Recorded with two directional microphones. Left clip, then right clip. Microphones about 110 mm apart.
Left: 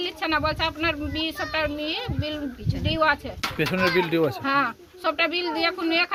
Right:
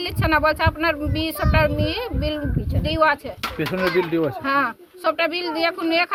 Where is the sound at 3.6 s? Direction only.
20° left (ahead or behind).